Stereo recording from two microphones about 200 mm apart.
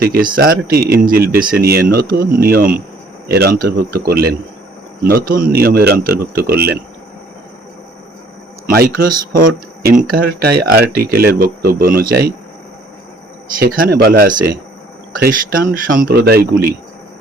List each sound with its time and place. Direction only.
0.0 s speech: 45° right (ahead or behind)
9.0 s speech: 45° right (ahead or behind)
13.6 s speech: 50° right (ahead or behind)